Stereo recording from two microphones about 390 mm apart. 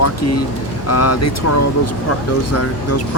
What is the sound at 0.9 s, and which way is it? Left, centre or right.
Speech, left.